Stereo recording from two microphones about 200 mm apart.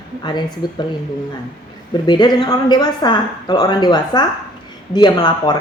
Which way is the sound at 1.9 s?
20° left (ahead or behind).